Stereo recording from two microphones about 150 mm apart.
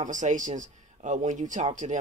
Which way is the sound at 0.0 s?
55° right (ahead or behind).